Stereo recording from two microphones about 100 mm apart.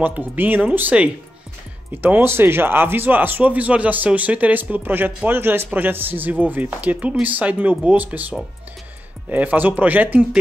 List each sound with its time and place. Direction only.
0.0 s speech: 20° right (ahead or behind)